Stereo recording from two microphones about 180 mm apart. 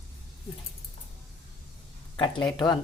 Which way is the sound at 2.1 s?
25° left (ahead or behind).